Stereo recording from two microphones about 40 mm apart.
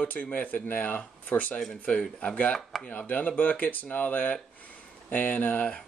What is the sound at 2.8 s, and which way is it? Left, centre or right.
Speech, left.